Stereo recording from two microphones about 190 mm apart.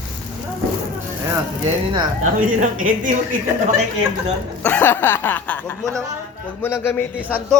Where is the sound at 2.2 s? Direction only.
40° right (ahead or behind).